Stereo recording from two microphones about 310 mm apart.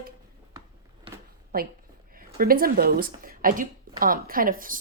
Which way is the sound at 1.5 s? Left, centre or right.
Right.